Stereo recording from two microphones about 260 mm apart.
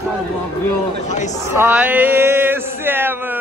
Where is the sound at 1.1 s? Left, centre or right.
Left.